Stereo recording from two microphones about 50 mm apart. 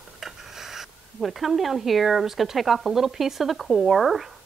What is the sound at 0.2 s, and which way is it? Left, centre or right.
Speech, centre.